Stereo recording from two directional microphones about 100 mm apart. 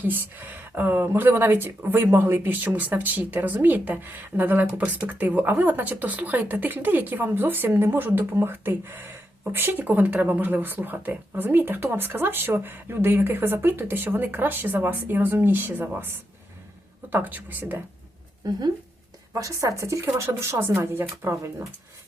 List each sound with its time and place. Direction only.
0.0 s speech: 20° right (ahead or behind)
17.1 s speech: 20° right (ahead or behind)
18.4 s speech: 35° right (ahead or behind)